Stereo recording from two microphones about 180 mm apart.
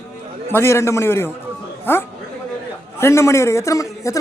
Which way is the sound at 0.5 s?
15° left (ahead or behind).